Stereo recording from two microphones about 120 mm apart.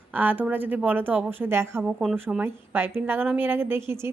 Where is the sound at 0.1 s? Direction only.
15° right (ahead or behind).